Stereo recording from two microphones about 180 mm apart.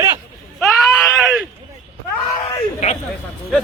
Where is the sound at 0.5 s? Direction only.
Centre (ahead or behind).